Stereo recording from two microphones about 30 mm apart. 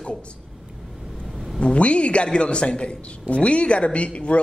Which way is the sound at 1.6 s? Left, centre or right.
Left.